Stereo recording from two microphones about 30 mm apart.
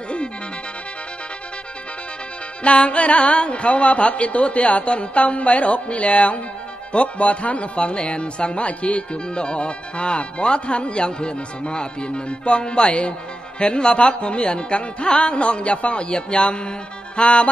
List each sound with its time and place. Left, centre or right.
2.6 s a woman's voice: left
9.1 s speech: left